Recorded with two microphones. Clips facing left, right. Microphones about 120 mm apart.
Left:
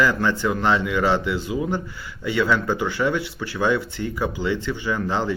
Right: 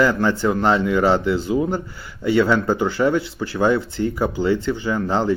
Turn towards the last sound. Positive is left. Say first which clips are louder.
# right 3 dB
turn(degrees=-35)  # may be behind; listen again after turning